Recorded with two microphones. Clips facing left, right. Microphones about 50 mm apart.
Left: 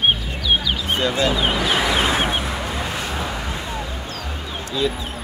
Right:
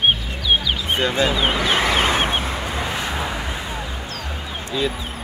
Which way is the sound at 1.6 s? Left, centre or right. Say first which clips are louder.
Right 1 dB; right.